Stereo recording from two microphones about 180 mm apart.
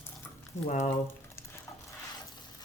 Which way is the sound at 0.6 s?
45° left (ahead or behind).